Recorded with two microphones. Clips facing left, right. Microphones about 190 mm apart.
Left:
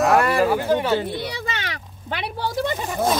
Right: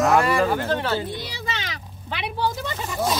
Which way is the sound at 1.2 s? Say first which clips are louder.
Left 3 dB; 55° left (ahead or behind).